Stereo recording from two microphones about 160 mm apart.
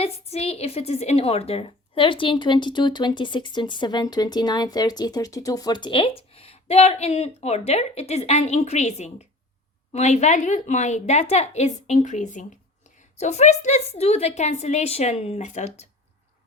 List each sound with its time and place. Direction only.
0.0 s a woman's voice: 40° left (ahead or behind)